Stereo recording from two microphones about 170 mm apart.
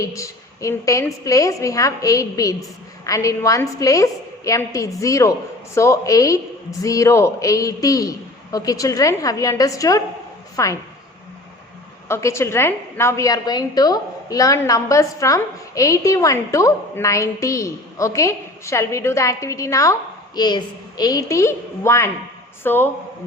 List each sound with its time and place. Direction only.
0.0 s a woman's voice: 20° left (ahead or behind)
12.0 s a woman's voice: 15° left (ahead or behind)